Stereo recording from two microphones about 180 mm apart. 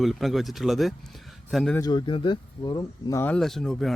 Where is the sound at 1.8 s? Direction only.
25° left (ahead or behind).